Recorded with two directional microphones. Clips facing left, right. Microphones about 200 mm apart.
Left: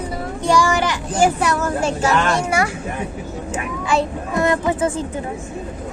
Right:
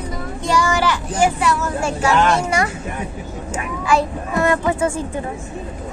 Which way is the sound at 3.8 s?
20° left (ahead or behind).